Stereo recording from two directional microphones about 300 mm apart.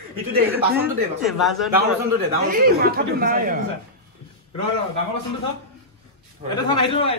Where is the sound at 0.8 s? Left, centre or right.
Centre.